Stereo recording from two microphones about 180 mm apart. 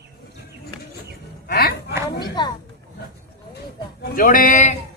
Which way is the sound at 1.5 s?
65° left (ahead or behind).